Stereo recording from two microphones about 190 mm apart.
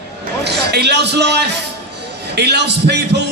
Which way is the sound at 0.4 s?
60° right (ahead or behind).